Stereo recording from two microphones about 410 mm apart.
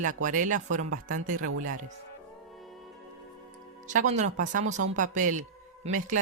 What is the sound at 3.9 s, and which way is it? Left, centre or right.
Speech, centre.